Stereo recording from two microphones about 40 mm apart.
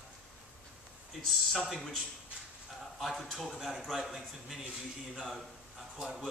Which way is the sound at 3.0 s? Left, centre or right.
Centre.